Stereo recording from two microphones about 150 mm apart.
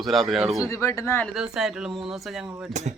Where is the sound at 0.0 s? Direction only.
Centre (ahead or behind).